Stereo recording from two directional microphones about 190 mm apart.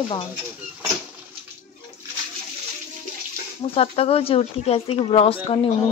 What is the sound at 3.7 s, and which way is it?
Speech, 30° left (ahead or behind).